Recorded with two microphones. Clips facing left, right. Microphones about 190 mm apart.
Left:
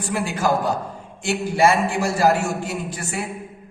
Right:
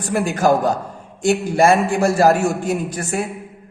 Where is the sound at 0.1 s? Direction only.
50° right (ahead or behind).